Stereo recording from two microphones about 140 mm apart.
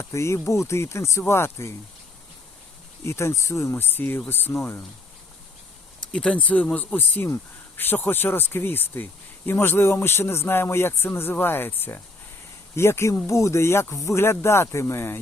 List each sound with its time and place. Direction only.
0.1 s speech: 20° left (ahead or behind)
3.0 s speech: 20° left (ahead or behind)
6.1 s speech: 5° left (ahead or behind)